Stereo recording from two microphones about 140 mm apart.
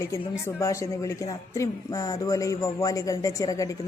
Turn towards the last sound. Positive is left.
turn(degrees=25)  # may be behind; listen again after turning